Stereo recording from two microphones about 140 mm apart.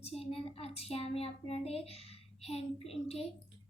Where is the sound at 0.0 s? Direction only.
45° left (ahead or behind).